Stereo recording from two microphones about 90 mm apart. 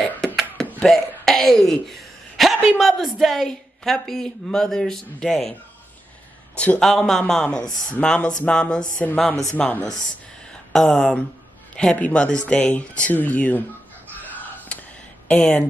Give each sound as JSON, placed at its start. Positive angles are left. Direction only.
{"t": 0.8, "sound": "a sound", "side_deg": 5}
{"t": 2.8, "sound": "speech", "side_deg": 0}
{"t": 6.5, "sound": "a man's voice", "side_deg": 15}
{"t": 6.8, "sound": "speech", "side_deg": 5}
{"t": 14.4, "sound": "a sound", "side_deg": 20}
{"t": 15.2, "sound": "speech", "side_deg": 10}